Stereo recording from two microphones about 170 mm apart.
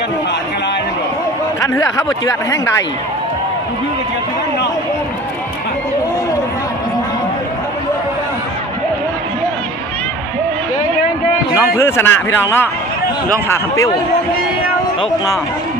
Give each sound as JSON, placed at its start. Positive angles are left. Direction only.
{"t": 1.6, "sound": "speech", "side_deg": 20}
{"t": 11.5, "sound": "speech", "side_deg": 15}